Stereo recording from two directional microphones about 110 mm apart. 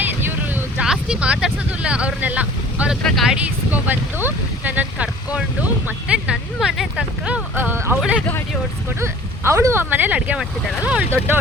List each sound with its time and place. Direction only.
0.0 s a sound: 20° right (ahead or behind)
0.8 s vehicle: 5° right (ahead or behind)
1.8 s speech: 10° right (ahead or behind)
3.0 s speech: 5° left (ahead or behind)
3.2 s speech: 15° right (ahead or behind)
6.1 s a sound: 10° right (ahead or behind)
9.0 s speech: 25° right (ahead or behind)